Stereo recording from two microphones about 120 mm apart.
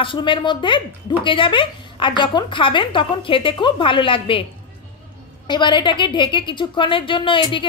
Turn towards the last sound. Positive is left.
turn(degrees=45)  # may be behind; listen again after turning